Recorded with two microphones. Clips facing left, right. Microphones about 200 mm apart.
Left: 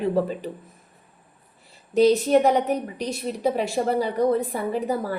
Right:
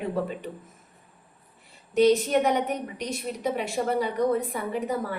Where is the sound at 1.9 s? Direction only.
35° left (ahead or behind).